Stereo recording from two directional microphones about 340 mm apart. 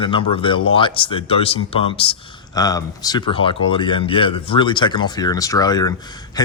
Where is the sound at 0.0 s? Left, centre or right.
Centre.